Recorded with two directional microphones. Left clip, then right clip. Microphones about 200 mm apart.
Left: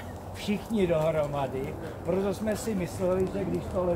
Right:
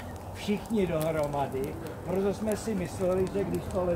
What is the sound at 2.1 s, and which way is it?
Speech, 40° left (ahead or behind).